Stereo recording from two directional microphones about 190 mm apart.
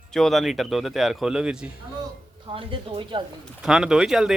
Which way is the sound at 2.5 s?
25° right (ahead or behind).